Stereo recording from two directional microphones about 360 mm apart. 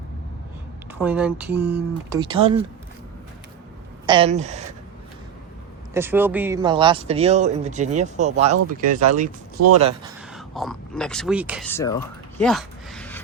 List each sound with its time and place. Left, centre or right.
0.9 s speech: centre
4.0 s speech: centre
5.9 s speech: centre; by 9.3 s right
10.3 s speech: centre
12.4 s a sound: centre